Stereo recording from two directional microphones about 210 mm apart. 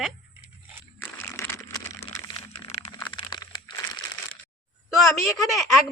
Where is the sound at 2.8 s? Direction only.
20° left (ahead or behind).